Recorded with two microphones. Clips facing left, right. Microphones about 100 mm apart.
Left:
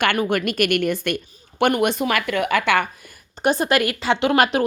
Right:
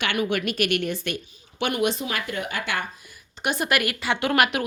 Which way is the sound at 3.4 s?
35° left (ahead or behind).